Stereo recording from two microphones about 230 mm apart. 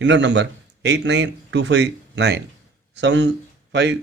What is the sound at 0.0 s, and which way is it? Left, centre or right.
A man's voice, right.